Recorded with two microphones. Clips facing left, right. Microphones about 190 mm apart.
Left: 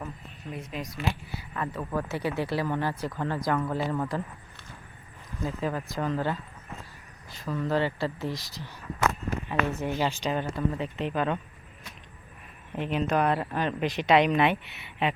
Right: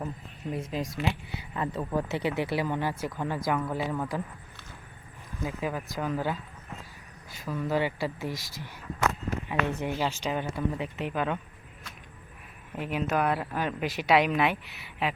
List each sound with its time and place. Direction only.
0.5 s speech: 30° right (ahead or behind); by 4.2 s centre (ahead or behind)
5.4 s speech: 10° right (ahead or behind)
7.3 s speech: 5° right (ahead or behind)
9.5 s speech: 15° right (ahead or behind)
12.7 s speech: 5° right (ahead or behind)